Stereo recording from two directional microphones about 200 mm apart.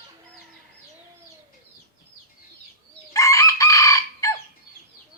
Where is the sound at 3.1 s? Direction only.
15° left (ahead or behind).